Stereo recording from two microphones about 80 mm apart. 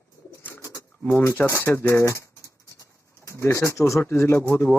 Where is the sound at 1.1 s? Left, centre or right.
Left.